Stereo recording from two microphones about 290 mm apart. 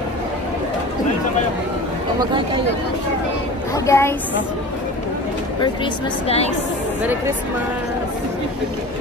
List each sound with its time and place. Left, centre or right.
3.7 s a woman's voice: centre
6.2 s a woman's voice: left